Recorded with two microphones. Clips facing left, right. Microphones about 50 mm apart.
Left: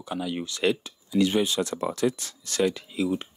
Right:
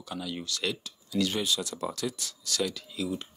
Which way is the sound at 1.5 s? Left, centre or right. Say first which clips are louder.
Left 7 dB; left.